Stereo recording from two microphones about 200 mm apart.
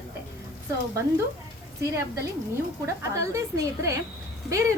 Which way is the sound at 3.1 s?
15° right (ahead or behind).